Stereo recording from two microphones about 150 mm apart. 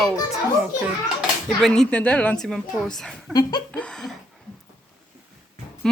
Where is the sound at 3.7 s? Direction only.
5° left (ahead or behind).